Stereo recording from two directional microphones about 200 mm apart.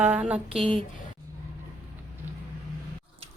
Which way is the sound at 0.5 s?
25° right (ahead or behind).